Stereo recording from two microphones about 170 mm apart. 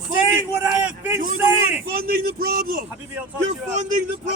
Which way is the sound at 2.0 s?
60° right (ahead or behind).